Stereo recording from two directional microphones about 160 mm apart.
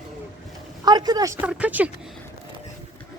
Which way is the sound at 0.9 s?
25° right (ahead or behind).